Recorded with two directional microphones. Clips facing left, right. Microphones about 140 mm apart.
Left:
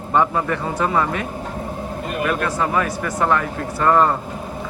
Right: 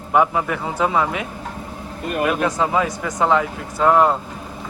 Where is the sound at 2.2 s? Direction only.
15° right (ahead or behind).